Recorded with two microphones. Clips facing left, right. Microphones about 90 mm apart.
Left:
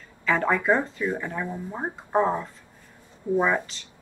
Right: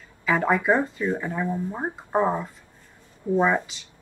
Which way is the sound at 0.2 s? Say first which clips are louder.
Right 1 dB; 10° right (ahead or behind).